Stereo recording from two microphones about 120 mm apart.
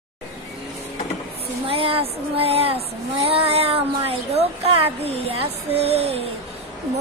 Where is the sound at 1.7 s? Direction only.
50° right (ahead or behind).